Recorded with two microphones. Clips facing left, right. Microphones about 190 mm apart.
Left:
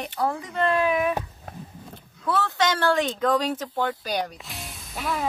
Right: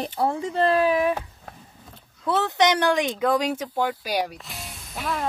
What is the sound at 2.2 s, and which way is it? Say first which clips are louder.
Speech: right 3 dB; 20° right (ahead or behind).